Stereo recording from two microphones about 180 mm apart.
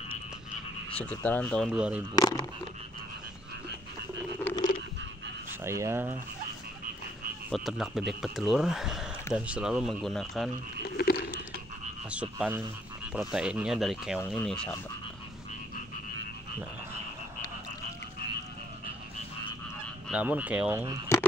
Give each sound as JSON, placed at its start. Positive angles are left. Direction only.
{"t": 0.9, "sound": "speech", "side_deg": 10}
{"t": 1.7, "sound": "speech", "side_deg": -5}
{"t": 2.1, "sound": "speech", "side_deg": 20}
{"t": 5.6, "sound": "speech", "side_deg": -15}
{"t": 7.5, "sound": "speech", "side_deg": 0}
{"t": 10.8, "sound": "frog", "side_deg": 60}
{"t": 12.1, "sound": "speech", "side_deg": -5}
{"t": 20.1, "sound": "speech", "side_deg": -10}